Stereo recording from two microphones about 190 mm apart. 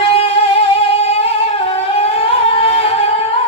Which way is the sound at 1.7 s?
30° left (ahead or behind).